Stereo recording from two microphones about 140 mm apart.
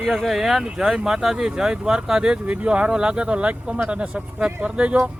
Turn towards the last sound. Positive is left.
turn(degrees=-10)  # may be behind; listen again after turning